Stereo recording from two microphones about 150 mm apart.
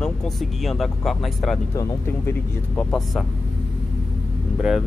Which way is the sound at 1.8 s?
15° left (ahead or behind).